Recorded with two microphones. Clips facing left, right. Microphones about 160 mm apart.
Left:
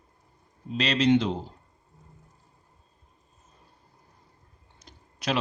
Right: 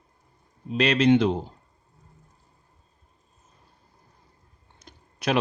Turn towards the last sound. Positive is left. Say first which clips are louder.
# right 4 dB
turn(degrees=-55)  # may be behind; listen again after turning